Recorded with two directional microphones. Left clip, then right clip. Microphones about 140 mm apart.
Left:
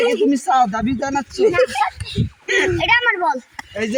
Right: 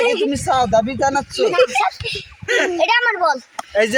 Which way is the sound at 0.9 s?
50° right (ahead or behind).